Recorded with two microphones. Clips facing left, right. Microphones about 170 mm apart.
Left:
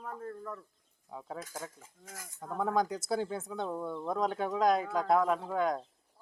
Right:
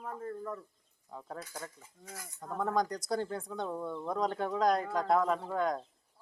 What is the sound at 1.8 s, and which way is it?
Speech, 45° left (ahead or behind).